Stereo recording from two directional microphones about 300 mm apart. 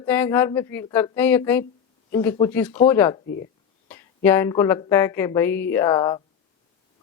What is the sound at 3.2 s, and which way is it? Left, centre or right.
Speech, left.